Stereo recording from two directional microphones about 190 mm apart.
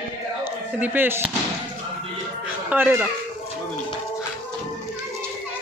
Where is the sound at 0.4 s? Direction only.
10° right (ahead or behind).